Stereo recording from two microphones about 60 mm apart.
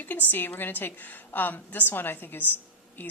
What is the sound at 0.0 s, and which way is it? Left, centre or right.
A woman's voice, left.